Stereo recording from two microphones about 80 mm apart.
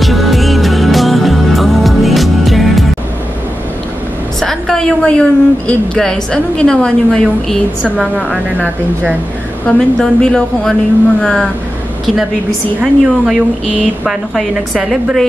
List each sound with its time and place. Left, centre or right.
0.0 s music: centre
4.4 s a woman's voice: centre
7.8 s a woman's voice: centre
9.7 s a woman's voice: centre
12.8 s a woman's voice: centre